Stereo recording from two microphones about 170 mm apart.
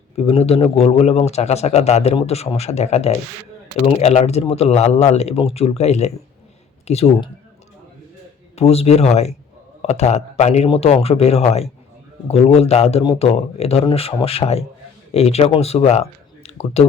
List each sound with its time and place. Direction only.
0.2 s a man's voice: 35° left (ahead or behind)
8.5 s a man's voice: 35° left (ahead or behind)